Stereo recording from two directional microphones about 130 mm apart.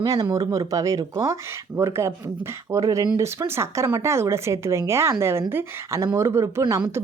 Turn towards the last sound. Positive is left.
turn(degrees=-25)  # may be behind; listen again after turning